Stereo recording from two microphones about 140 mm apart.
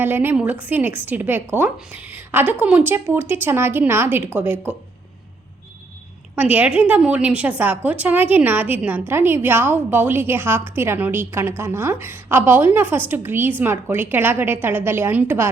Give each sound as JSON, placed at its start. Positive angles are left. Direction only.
{"t": 0.0, "sound": "a woman's voice", "side_deg": -15}
{"t": 6.3, "sound": "a woman's voice", "side_deg": -10}